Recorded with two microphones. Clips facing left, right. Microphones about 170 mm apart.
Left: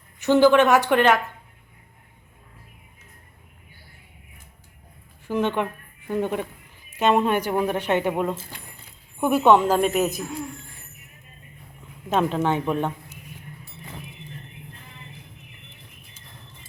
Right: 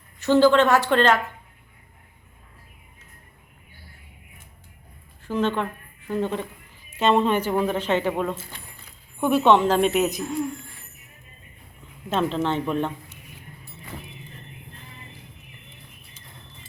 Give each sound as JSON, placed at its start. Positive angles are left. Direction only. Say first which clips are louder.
{"t": 0.2, "sound": "a woman's voice", "louder": "left 1 dB", "side_deg": 15}
{"t": 5.2, "sound": "a woman's voice", "louder": "left 1 dB", "side_deg": 15}
{"t": 12.1, "sound": "a woman's voice", "louder": "left 1 dB", "side_deg": 10}